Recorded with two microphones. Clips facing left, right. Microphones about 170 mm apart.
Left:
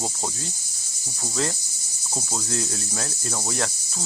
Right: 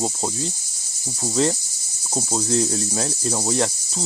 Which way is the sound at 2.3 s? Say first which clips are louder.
Right 8 dB; 30° right (ahead or behind).